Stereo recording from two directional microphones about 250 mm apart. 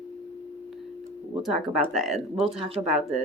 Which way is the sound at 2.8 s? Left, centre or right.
Centre.